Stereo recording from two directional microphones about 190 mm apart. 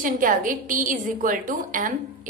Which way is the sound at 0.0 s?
45° right (ahead or behind).